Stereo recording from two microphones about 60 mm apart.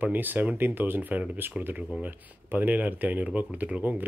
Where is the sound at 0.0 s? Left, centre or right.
Right.